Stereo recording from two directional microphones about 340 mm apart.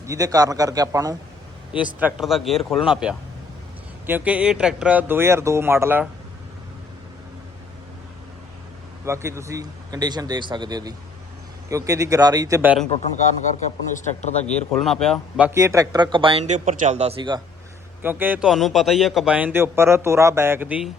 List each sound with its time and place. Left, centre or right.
0.0 s speech: centre
9.0 s speech: centre
13.9 s a man's voice: left
14.4 s speech: centre